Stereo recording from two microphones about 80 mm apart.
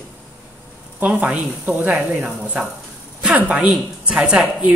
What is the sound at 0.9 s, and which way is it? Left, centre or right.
Speech, centre.